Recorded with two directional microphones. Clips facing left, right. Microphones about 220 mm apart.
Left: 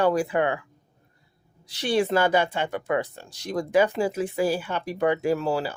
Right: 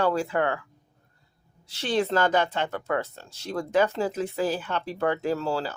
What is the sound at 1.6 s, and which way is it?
Speech, 15° left (ahead or behind).